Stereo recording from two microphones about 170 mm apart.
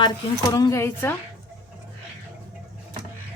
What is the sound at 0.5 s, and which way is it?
Speech, 20° left (ahead or behind).